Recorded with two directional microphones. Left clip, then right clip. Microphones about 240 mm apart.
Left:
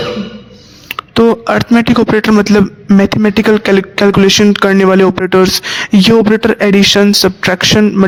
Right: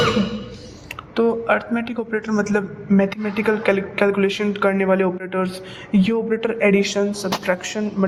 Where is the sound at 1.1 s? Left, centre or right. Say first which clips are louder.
Left 9 dB; left.